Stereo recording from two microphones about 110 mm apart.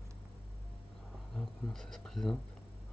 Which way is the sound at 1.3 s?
5° left (ahead or behind).